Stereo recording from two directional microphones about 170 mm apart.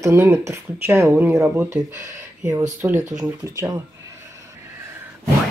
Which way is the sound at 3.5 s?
15° right (ahead or behind).